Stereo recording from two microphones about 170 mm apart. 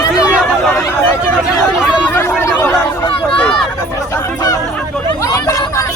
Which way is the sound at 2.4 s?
15° left (ahead or behind).